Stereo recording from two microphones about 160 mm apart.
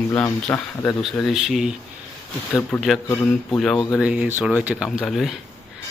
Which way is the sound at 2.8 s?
5° left (ahead or behind).